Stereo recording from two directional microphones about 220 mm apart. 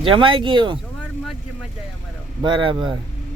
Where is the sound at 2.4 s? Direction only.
20° right (ahead or behind).